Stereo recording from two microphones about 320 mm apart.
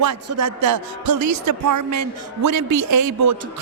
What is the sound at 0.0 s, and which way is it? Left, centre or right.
A man's voice, right.